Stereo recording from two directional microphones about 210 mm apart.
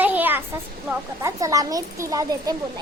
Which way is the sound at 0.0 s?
10° right (ahead or behind).